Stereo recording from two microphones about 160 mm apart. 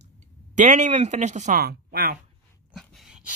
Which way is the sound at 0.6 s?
45° right (ahead or behind).